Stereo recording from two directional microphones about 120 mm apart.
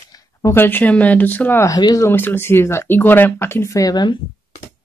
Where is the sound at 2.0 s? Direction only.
20° left (ahead or behind); by 4.2 s 35° left (ahead or behind).